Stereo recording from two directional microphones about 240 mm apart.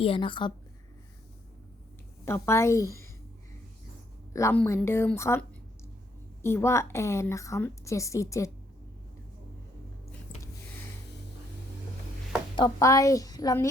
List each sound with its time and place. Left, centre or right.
0.0 s a woman's voice: left
2.2 s a woman's voice: centre
4.3 s a woman's voice: centre
12.5 s a woman's voice: centre